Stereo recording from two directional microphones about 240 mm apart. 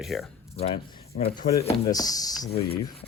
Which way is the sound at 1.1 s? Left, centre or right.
Left.